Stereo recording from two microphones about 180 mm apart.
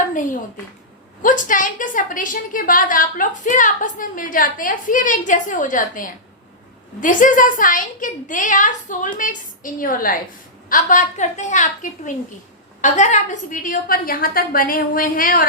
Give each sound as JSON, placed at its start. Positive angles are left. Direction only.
{"t": 1.2, "sound": "a woman's voice", "side_deg": 45}